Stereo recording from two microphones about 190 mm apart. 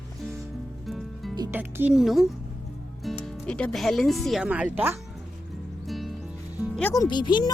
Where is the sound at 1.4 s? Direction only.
10° right (ahead or behind).